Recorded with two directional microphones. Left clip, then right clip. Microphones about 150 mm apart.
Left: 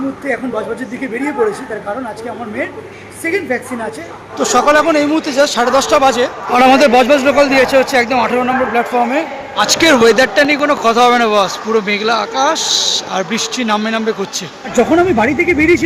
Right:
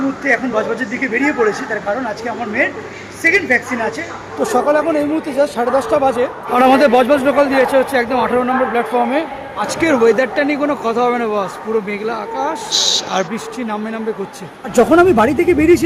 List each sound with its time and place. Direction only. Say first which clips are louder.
0.3 s a woman's voice: right 3 dB; 10° left (ahead or behind)
3.2 s a woman's voice: right 4 dB; 15° left (ahead or behind)
4.4 s speech: left 4 dB; 10° right (ahead or behind)
15.1 s speech: even; 30° right (ahead or behind)